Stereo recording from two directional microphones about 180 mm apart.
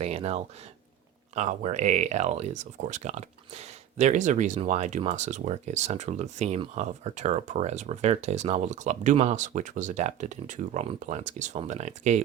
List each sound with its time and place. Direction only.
0.0 s speech: 35° right (ahead or behind)
1.4 s speech: 40° right (ahead or behind)